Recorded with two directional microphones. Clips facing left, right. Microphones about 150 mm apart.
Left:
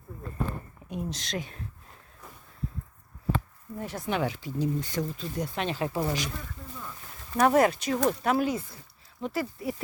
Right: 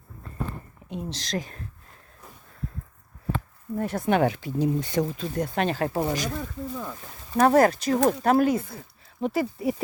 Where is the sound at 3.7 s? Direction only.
50° right (ahead or behind); by 5.3 s 75° right (ahead or behind).